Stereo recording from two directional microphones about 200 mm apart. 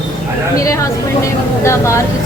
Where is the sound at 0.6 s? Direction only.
15° left (ahead or behind).